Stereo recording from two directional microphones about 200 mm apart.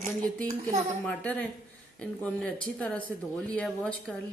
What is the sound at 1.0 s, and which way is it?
A woman's voice, 5° left (ahead or behind).